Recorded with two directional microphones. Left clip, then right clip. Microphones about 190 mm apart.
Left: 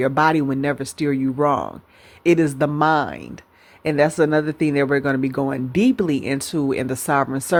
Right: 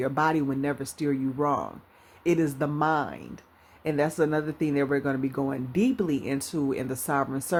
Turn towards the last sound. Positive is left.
turn(degrees=35)  # may be behind; listen again after turning